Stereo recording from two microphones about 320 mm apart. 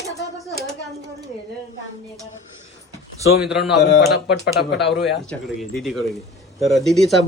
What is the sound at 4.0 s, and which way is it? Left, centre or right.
Speech, left.